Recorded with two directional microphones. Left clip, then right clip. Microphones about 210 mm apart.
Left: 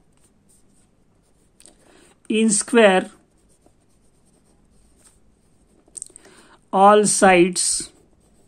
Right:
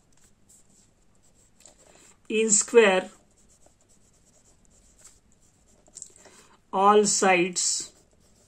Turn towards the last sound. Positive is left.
turn(degrees=45)  # may be behind; listen again after turning